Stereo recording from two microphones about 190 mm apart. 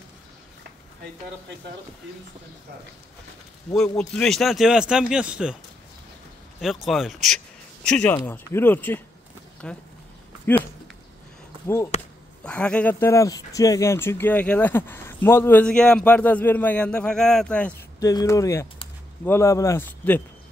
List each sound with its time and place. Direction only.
3.7 s speech: 5° left (ahead or behind)
6.6 s speech: centre (ahead or behind)
11.6 s speech: 15° left (ahead or behind)
18.0 s speech: 15° left (ahead or behind)